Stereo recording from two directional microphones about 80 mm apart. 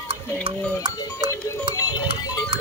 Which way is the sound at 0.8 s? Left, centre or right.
Right.